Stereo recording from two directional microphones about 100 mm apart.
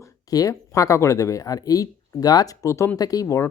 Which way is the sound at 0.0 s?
35° left (ahead or behind).